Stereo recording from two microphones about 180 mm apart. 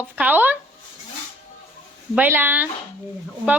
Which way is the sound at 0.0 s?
10° right (ahead or behind).